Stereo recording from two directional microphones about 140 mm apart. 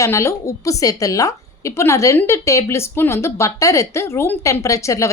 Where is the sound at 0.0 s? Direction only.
20° left (ahead or behind).